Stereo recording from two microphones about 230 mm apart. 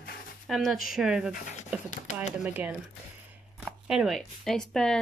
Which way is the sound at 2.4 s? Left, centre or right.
Centre.